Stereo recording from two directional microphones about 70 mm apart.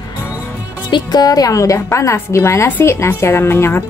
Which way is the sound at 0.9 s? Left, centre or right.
Left.